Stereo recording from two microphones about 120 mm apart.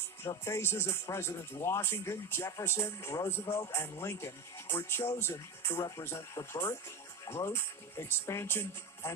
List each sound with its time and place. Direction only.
0.2 s speech: 20° left (ahead or behind)